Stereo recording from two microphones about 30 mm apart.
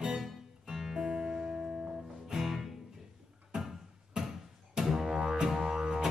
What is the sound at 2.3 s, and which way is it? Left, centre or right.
Music, centre.